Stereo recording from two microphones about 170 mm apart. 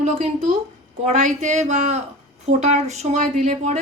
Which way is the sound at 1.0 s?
45° right (ahead or behind).